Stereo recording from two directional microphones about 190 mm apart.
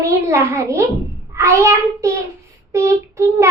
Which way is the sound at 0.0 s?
15° right (ahead or behind).